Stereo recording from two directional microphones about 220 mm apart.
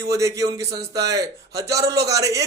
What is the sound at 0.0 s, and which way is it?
Speech, 15° right (ahead or behind).